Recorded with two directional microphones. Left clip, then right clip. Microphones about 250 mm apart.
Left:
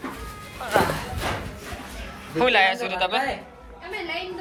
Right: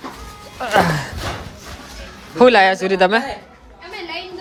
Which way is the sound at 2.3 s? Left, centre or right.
Right.